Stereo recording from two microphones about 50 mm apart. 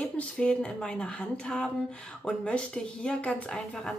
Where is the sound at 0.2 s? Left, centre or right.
Centre.